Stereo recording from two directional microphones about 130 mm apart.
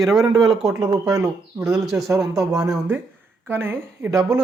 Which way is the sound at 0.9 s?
25° right (ahead or behind).